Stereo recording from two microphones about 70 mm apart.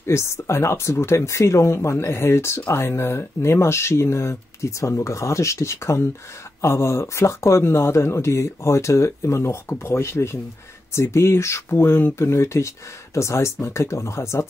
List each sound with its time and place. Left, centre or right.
0.0 s speech: left